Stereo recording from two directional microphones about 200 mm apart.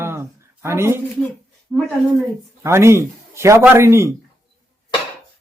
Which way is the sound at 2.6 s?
15° right (ahead or behind).